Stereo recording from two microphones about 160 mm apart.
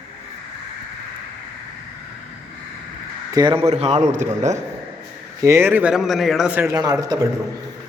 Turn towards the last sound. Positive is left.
turn(degrees=-25)  # may be behind; listen again after turning